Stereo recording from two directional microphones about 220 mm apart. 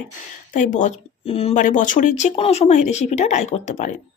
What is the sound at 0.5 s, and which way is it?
Speech, 35° left (ahead or behind).